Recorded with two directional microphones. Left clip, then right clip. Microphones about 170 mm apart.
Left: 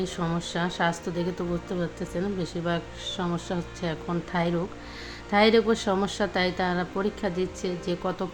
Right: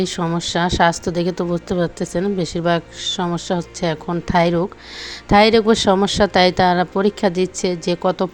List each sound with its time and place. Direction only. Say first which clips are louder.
0.0 s a woman's voice: right 9 dB; 45° right (ahead or behind)